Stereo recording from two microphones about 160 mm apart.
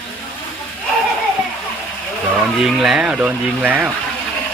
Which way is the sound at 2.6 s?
Centre (ahead or behind).